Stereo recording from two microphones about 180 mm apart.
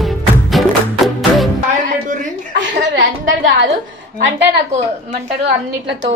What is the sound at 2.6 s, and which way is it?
A woman's voice, 90° right.